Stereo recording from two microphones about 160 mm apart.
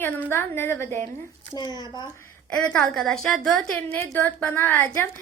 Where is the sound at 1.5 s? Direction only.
25° left (ahead or behind).